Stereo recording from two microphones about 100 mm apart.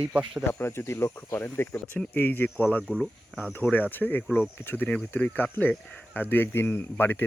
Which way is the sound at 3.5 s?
15° left (ahead or behind).